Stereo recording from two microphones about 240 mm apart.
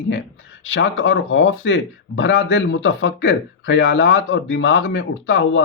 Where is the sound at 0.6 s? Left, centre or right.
Left.